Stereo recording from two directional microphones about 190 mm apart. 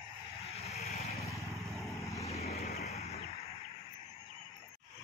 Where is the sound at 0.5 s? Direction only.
35° left (ahead or behind).